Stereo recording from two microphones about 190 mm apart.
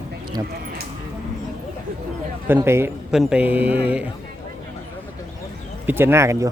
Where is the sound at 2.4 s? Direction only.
10° right (ahead or behind).